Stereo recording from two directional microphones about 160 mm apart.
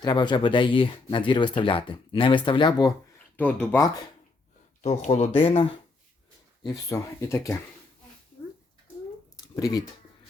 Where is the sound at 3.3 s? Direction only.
10° left (ahead or behind).